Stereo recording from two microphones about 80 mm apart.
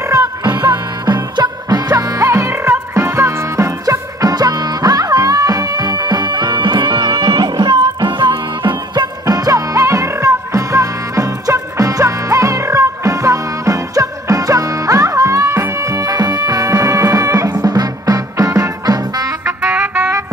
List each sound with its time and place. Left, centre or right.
0.1 s music: right
0.5 s music: right
19.7 s music: centre